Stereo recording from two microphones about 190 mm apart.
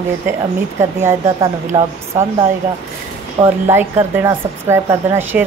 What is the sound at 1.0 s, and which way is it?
A woman's voice, 20° right (ahead or behind).